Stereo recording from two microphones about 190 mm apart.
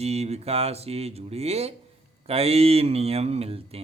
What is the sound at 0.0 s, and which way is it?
Speech, 35° right (ahead or behind).